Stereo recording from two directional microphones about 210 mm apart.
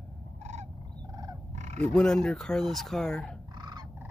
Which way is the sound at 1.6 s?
35° right (ahead or behind).